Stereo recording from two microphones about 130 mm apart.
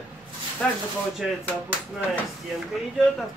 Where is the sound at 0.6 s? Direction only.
10° left (ahead or behind).